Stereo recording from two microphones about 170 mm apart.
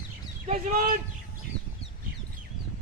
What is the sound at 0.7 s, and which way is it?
Speech, 55° right (ahead or behind).